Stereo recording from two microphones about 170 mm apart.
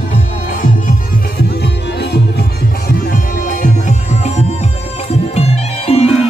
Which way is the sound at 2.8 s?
50° left (ahead or behind).